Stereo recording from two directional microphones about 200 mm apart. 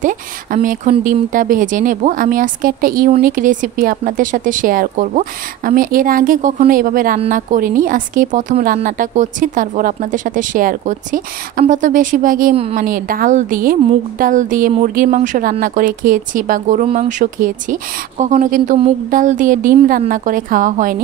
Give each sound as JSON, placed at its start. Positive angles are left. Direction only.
{"t": 0.0, "sound": "speech", "side_deg": -40}